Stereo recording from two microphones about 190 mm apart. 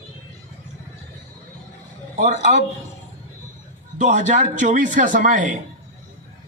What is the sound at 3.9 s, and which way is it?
Speech, 40° right (ahead or behind).